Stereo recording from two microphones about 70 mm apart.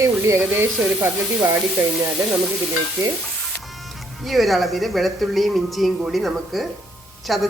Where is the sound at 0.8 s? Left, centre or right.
Right.